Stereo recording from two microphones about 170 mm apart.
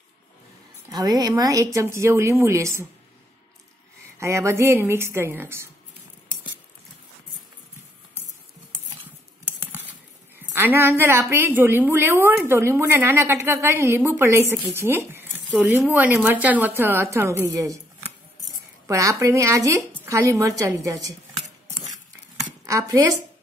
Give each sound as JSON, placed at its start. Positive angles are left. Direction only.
{"t": 0.8, "sound": "a woman's voice", "side_deg": -20}
{"t": 4.2, "sound": "a woman's voice", "side_deg": -15}
{"t": 10.5, "sound": "a woman's voice", "side_deg": -15}
{"t": 18.9, "sound": "a woman's voice", "side_deg": -20}
{"t": 22.7, "sound": "a woman's voice", "side_deg": -20}